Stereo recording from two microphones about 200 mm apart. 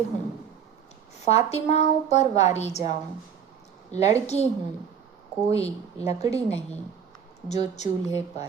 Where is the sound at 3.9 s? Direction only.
35° left (ahead or behind).